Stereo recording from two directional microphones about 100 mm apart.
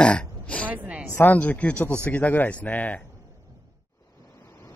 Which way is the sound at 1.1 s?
15° left (ahead or behind).